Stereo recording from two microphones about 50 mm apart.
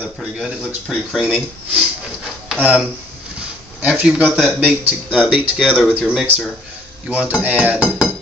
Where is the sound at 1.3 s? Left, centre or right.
Right.